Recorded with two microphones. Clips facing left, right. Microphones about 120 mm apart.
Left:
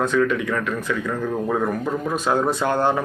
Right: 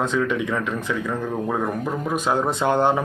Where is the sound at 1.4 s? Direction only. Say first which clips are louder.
Left 2 dB; 5° right (ahead or behind).